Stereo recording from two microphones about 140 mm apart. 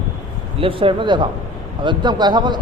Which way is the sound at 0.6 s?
40° right (ahead or behind).